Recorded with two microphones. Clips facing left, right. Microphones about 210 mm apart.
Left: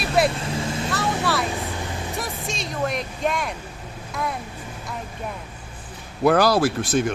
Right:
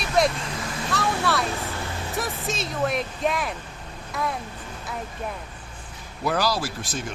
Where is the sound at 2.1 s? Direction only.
Centre (ahead or behind).